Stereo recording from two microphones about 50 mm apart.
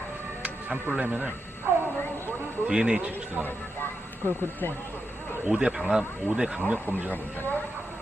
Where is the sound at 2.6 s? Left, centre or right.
Centre.